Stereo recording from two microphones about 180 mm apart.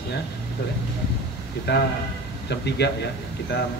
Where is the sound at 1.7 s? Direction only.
65° left (ahead or behind).